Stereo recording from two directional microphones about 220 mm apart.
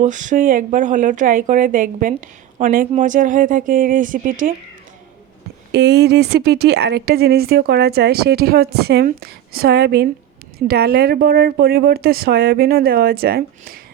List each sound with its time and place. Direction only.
0.0 s speech: 35° right (ahead or behind)
5.7 s speech: 50° right (ahead or behind)